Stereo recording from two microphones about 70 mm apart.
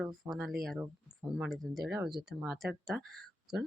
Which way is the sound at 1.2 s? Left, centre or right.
Centre.